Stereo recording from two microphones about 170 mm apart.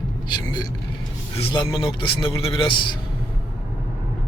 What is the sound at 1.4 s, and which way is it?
A man's voice, 30° left (ahead or behind).